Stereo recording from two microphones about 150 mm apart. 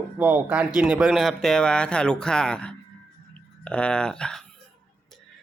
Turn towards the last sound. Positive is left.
turn(degrees=5)  # may be behind; listen again after turning